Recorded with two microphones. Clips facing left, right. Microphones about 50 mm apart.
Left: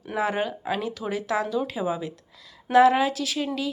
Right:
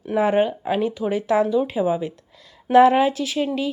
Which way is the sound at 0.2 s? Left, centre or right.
Right.